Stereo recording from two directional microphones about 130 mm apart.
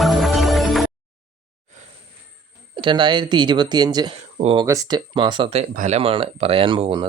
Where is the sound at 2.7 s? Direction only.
40° right (ahead or behind).